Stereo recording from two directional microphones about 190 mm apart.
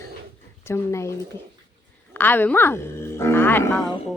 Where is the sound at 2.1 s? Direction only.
10° left (ahead or behind).